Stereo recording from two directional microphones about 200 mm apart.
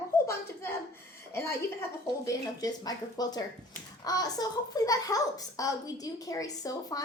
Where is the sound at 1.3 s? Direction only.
10° left (ahead or behind).